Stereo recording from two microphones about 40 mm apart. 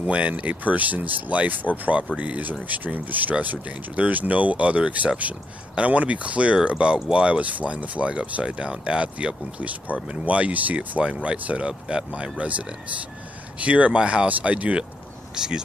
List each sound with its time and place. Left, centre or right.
0.0 s speech: right
2.7 s speech: right
15.3 s speech: centre